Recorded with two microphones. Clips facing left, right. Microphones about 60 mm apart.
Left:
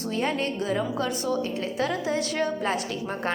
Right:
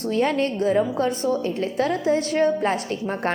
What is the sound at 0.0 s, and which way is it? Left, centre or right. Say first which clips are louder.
A woman's voice: right 6 dB; right.